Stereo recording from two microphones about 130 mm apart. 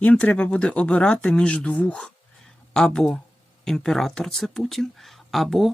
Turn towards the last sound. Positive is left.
turn(degrees=0)  # may be behind; listen again after turning